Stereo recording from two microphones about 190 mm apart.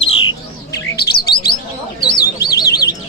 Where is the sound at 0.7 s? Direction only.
55° left (ahead or behind).